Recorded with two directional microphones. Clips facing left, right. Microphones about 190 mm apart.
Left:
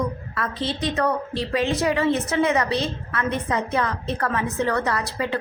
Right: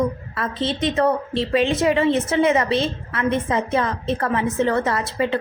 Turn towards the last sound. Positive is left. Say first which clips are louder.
# right 4 dB
turn(degrees=-25)  # may be behind; listen again after turning